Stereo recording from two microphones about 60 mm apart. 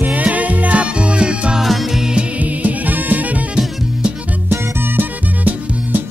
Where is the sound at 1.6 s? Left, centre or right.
Centre.